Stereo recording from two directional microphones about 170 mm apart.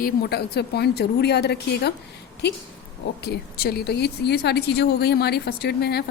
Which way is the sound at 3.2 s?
70° left (ahead or behind).